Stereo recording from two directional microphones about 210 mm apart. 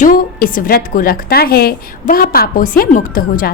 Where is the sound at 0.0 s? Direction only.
40° left (ahead or behind).